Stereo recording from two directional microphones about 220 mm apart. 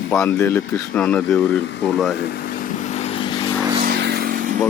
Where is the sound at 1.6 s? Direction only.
50° left (ahead or behind).